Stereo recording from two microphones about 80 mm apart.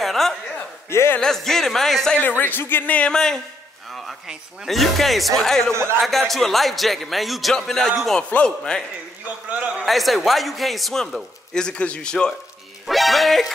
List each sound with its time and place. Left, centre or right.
0.0 s a sound: centre
0.8 s speech: left
1.2 s speech: centre
2.1 s speech: left
3.0 s speech: centre
5.7 s a man's voice: right
5.9 s speech: centre
8.2 s speech: centre
9.8 s speech: centre
11.5 s speech: centre